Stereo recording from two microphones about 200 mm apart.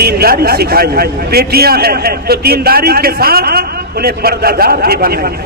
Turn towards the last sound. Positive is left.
turn(degrees=-50)  # may be behind; listen again after turning